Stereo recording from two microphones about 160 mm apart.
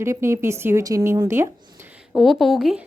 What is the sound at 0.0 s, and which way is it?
A woman's voice, 15° right (ahead or behind).